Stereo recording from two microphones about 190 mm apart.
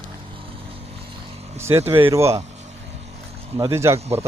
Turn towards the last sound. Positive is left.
turn(degrees=-15)  # may be behind; listen again after turning